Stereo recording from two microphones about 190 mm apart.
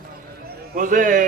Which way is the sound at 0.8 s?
45° right (ahead or behind).